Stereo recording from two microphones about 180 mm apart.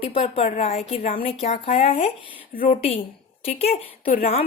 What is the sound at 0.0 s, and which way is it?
Speech, 30° left (ahead or behind).